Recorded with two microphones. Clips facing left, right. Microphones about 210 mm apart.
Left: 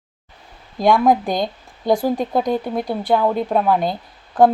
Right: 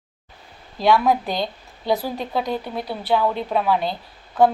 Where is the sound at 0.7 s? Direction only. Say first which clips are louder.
Left 3 dB; 50° left (ahead or behind).